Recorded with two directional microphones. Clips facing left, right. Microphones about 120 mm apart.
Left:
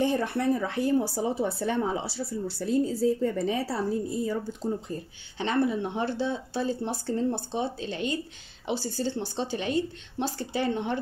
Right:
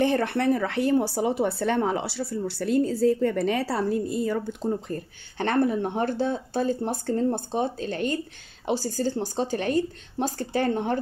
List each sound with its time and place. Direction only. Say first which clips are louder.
0.0 s a woman's voice: right 3 dB; 70° right (ahead or behind); by 11.0 s 45° right (ahead or behind)